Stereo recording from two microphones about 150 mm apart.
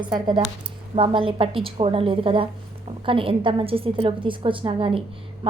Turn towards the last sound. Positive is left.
turn(degrees=-35)  # may be behind; listen again after turning